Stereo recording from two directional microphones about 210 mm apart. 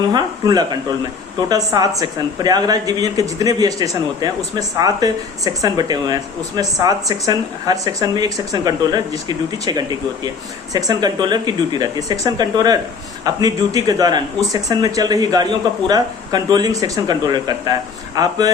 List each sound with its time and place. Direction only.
0.1 s a woman's voice: 20° right (ahead or behind)